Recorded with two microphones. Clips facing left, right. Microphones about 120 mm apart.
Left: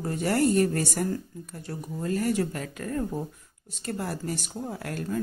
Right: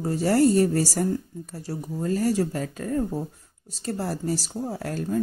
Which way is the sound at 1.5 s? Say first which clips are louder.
Right 4 dB; 35° right (ahead or behind).